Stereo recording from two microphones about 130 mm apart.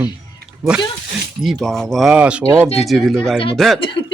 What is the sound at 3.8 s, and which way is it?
Speech, 40° left (ahead or behind).